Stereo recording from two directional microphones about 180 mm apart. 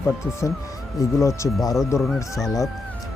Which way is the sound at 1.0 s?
15° left (ahead or behind).